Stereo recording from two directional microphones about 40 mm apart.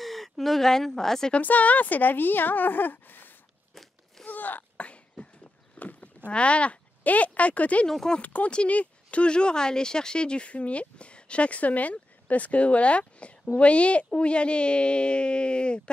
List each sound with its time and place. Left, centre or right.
0.0 s speech: centre
1.4 s a woman's voice: left
4.3 s sneeze: left
4.7 s a sound: left
5.9 s speech: left
7.9 s speech: centre
8.2 s speech: left